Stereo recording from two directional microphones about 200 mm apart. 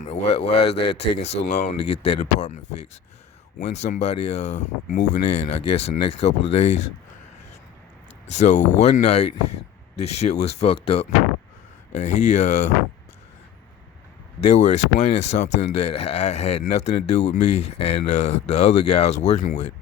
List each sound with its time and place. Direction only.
0.0 s speech: 30° left (ahead or behind)
8.4 s speech: 35° left (ahead or behind)
14.4 s speech: 35° left (ahead or behind)